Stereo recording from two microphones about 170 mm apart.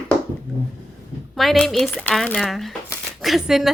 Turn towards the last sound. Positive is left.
turn(degrees=0)  # may be behind; listen again after turning